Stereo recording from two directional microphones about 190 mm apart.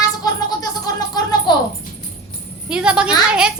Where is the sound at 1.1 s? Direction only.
20° left (ahead or behind).